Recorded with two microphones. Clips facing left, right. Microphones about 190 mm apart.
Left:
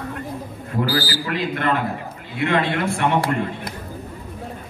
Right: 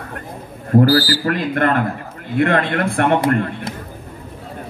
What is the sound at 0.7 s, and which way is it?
A man's voice, 45° right (ahead or behind).